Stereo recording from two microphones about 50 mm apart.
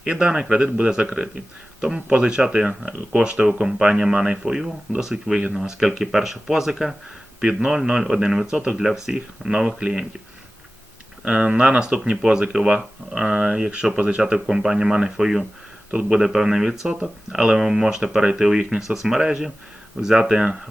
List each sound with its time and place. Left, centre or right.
0.0 s a man's voice: centre
7.4 s a man's voice: centre
11.3 s speech: right
12.2 s a man's voice: centre
14.3 s a man's voice: centre